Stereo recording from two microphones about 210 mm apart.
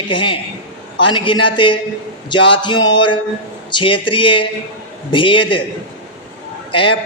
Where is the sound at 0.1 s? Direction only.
25° left (ahead or behind).